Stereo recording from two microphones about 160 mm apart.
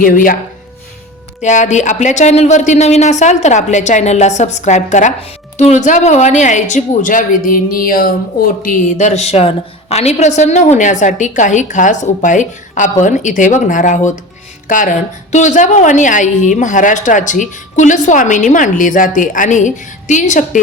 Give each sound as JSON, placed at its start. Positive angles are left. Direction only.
{"t": 0.0, "sound": "speech", "side_deg": 60}
{"t": 1.4, "sound": "a woman's voice", "side_deg": 45}